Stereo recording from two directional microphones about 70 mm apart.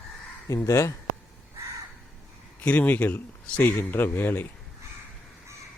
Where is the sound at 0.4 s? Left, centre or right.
Left.